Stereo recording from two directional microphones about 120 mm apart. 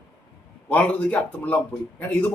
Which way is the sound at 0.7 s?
10° left (ahead or behind).